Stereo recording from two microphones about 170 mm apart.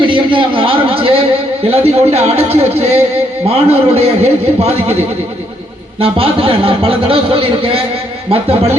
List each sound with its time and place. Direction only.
0.0 s speech: 30° right (ahead or behind)
6.0 s speech: 35° right (ahead or behind)